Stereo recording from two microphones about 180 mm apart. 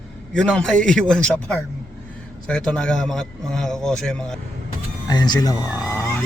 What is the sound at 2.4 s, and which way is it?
A man's voice, 5° left (ahead or behind).